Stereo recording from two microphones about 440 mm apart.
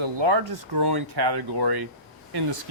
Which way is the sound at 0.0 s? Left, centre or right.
Right.